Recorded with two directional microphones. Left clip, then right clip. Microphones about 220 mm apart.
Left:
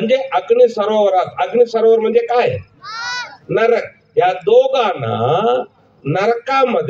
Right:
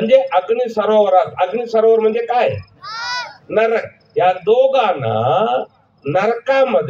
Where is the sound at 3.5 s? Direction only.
55° left (ahead or behind).